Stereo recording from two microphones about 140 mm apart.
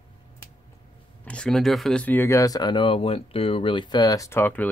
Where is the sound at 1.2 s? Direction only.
5° left (ahead or behind).